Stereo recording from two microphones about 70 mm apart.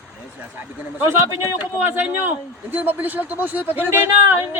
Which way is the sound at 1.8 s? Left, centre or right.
Right.